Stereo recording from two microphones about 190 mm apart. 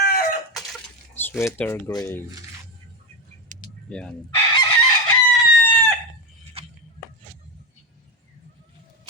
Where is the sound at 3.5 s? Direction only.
40° right (ahead or behind).